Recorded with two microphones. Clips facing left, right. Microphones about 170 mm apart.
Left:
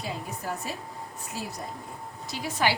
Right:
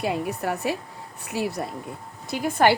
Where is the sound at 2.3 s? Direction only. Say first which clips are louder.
Right 8 dB; 55° right (ahead or behind).